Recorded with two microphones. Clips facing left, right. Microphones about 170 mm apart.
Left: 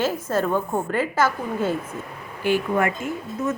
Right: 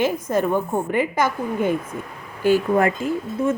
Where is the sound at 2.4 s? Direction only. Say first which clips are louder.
Right 4 dB; 35° right (ahead or behind).